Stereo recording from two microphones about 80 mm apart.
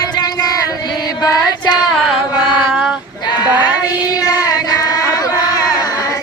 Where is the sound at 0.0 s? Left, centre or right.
Left.